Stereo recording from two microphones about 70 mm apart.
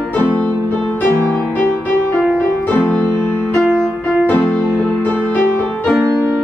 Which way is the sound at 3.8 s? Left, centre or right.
Centre.